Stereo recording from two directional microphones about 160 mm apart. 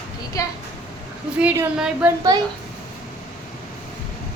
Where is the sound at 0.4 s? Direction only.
20° left (ahead or behind).